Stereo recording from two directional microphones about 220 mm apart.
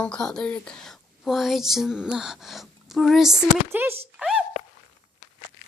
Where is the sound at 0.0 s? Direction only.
5° left (ahead or behind).